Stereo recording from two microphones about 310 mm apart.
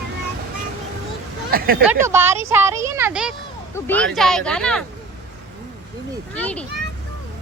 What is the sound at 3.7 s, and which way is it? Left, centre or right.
Speech, centre.